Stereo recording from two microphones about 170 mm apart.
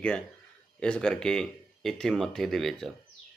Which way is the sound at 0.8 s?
5° left (ahead or behind).